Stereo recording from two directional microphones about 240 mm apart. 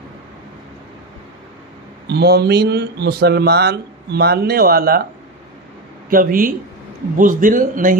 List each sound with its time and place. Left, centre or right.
2.0 s speech: right
6.0 s speech: right